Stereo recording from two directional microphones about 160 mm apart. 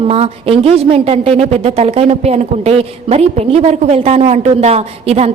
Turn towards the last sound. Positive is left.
turn(degrees=-40)  # may be behind; listen again after turning